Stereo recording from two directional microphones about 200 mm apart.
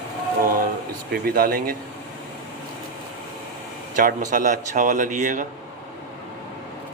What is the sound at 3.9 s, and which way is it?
A man's voice, 40° right (ahead or behind).